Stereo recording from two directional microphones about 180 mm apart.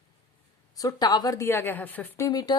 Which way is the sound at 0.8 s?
20° left (ahead or behind).